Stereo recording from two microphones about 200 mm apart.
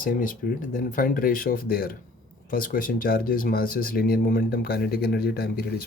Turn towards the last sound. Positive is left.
turn(degrees=50)  # may be behind; listen again after turning